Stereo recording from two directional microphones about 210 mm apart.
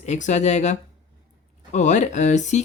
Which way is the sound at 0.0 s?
35° left (ahead or behind).